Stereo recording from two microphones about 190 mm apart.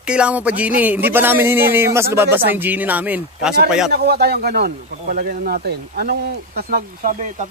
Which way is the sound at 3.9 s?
55° right (ahead or behind).